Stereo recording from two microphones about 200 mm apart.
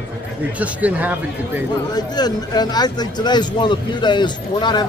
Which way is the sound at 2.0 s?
20° left (ahead or behind).